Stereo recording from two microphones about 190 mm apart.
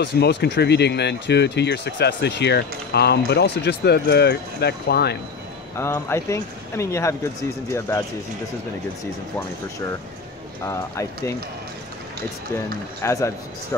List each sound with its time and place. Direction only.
0.0 s speech: 60° left (ahead or behind)
5.8 s speech: 15° left (ahead or behind)
10.6 s speech: 15° left (ahead or behind)
13.0 s speech: 15° left (ahead or behind)